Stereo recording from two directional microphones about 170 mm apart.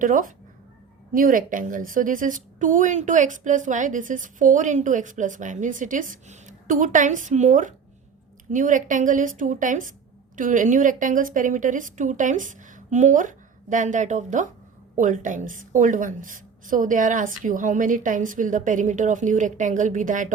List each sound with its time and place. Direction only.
0.0 s a woman's voice: 50° right (ahead or behind)